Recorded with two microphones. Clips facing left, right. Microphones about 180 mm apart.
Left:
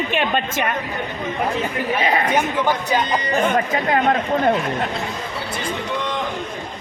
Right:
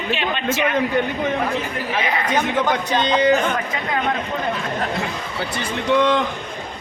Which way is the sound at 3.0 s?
90° right.